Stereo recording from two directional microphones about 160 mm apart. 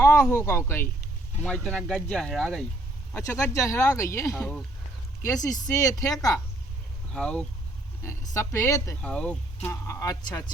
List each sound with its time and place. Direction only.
0.0 s speech: 15° left (ahead or behind)
1.4 s speech: centre (ahead or behind)
3.1 s speech: 15° left (ahead or behind)
4.4 s speech: 5° left (ahead or behind)
5.2 s speech: 25° left (ahead or behind)
7.1 s speech: 5° left (ahead or behind)
8.0 s speech: 20° left (ahead or behind)
9.0 s speech: 5° left (ahead or behind)
9.6 s speech: 20° left (ahead or behind)